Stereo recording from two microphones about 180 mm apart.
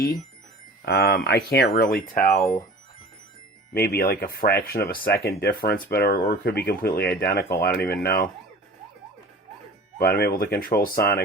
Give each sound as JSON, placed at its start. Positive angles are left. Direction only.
{"t": 0.9, "sound": "speech", "side_deg": 60}
{"t": 3.7, "sound": "speech", "side_deg": 60}
{"t": 10.0, "sound": "speech", "side_deg": 60}